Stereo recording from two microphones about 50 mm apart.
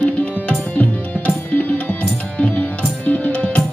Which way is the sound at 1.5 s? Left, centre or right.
Left.